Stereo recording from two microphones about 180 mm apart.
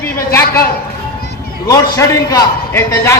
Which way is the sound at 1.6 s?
20° left (ahead or behind).